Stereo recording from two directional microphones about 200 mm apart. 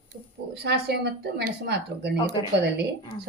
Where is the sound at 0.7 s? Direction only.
55° right (ahead or behind).